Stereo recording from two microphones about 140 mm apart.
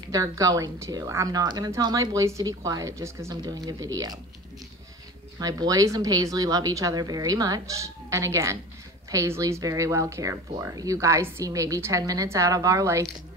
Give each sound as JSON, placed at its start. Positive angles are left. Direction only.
{"t": 0.1, "sound": "a woman's voice", "side_deg": -25}
{"t": 5.4, "sound": "a woman's voice", "side_deg": -25}